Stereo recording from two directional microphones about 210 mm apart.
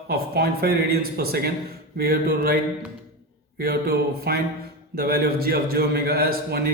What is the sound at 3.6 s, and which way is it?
A man's voice, 45° right (ahead or behind).